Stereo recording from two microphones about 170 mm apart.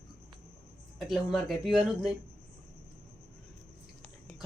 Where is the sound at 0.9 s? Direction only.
Centre (ahead or behind).